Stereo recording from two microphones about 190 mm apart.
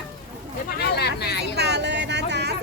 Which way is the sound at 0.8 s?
60° left (ahead or behind).